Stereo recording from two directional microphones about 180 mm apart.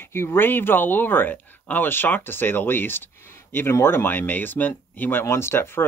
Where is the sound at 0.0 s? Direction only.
15° left (ahead or behind).